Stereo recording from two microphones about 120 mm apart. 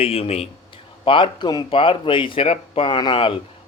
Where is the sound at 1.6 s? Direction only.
50° left (ahead or behind).